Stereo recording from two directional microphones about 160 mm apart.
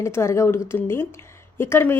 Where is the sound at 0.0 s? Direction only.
15° left (ahead or behind).